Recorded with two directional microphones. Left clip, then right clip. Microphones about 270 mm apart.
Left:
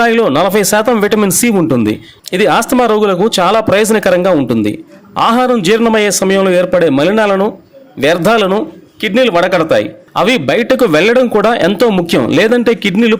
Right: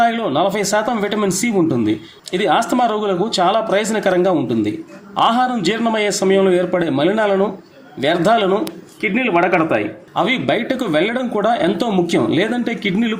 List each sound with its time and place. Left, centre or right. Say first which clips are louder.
0.0 s speech: left 6 dB; left
9.1 s speech: left 6 dB; left